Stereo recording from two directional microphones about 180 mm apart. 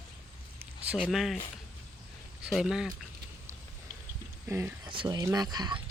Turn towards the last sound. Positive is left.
turn(degrees=-25)  # may be behind; listen again after turning